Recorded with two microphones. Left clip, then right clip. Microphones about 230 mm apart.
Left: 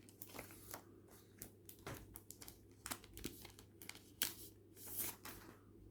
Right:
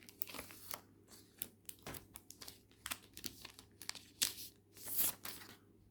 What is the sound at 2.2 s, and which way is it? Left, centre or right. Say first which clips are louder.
Computer keyboard: right 4 dB; centre.